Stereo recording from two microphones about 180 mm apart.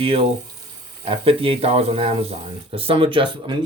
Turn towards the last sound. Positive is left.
turn(degrees=-25)  # may be behind; listen again after turning